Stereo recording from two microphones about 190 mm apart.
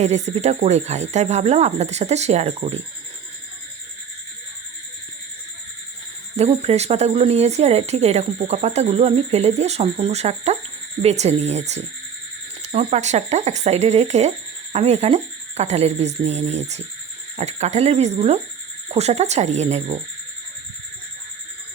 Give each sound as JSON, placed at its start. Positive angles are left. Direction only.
{"t": 0.0, "sound": "speech", "side_deg": -35}
{"t": 6.3, "sound": "speech", "side_deg": -35}